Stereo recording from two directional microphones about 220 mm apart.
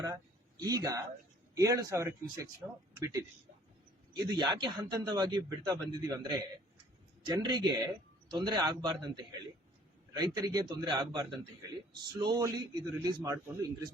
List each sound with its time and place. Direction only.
0.6 s a man's voice: 15° right (ahead or behind)
7.3 s a man's voice: 20° right (ahead or behind)